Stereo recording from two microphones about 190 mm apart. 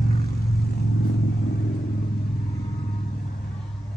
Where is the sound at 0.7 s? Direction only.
55° left (ahead or behind).